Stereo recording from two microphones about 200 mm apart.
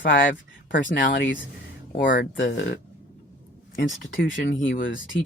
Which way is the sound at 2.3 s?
60° left (ahead or behind).